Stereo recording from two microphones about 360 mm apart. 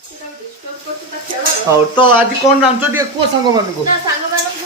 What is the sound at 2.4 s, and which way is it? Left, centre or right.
Speech, centre.